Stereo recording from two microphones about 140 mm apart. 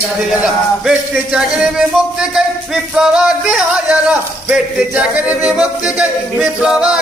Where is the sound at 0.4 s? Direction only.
5° right (ahead or behind).